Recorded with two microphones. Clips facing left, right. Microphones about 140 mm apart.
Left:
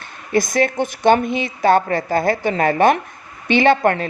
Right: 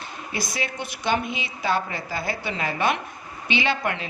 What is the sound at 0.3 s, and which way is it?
A woman's voice, 50° left (ahead or behind).